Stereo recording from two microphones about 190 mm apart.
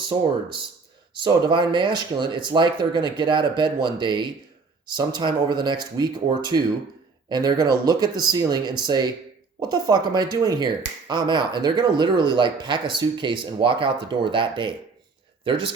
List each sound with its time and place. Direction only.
1.2 s speech: 25° right (ahead or behind)